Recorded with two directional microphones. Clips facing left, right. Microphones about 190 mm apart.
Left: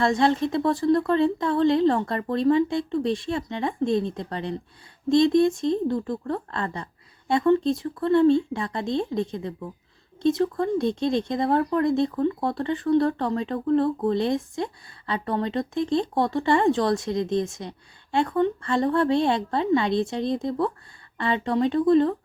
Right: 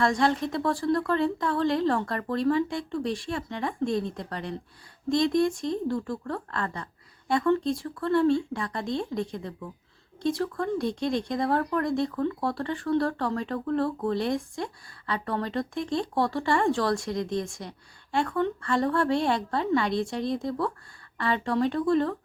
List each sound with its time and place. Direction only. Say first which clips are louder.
0.0 s speech: left 3 dB; 25° left (ahead or behind)